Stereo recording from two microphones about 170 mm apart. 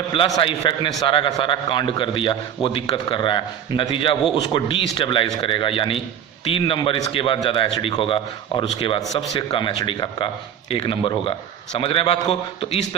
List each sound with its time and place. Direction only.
0.1 s a man's voice: 30° left (ahead or behind)